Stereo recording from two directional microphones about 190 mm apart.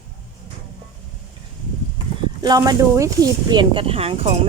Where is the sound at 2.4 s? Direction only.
20° right (ahead or behind).